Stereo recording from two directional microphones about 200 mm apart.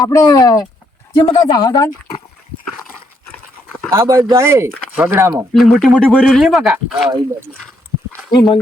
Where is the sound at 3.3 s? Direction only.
5° left (ahead or behind).